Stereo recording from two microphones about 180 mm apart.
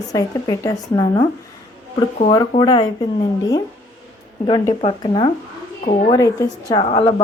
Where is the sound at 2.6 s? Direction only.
25° left (ahead or behind).